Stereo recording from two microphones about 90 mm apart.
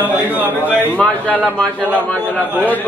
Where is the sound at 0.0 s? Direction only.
20° right (ahead or behind).